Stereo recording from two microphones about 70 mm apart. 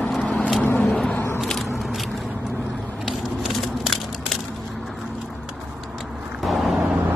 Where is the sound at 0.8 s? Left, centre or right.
Centre.